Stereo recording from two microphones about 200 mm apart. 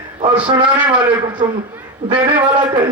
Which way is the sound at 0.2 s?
25° right (ahead or behind).